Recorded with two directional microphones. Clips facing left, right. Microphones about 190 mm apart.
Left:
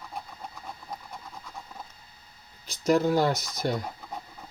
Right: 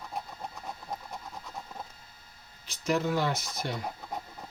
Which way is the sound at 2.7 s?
40° left (ahead or behind).